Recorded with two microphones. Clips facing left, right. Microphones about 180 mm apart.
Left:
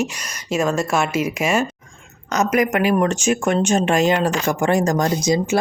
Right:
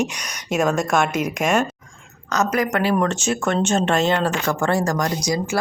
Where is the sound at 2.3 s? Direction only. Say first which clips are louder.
Left 2 dB; 15° left (ahead or behind).